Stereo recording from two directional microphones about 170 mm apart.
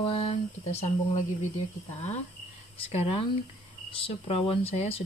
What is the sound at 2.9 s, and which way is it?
Speech, 35° left (ahead or behind).